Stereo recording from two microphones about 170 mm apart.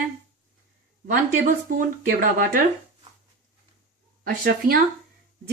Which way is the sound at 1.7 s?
55° right (ahead or behind).